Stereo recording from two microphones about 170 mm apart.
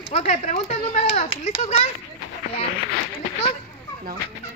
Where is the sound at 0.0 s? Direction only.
40° left (ahead or behind).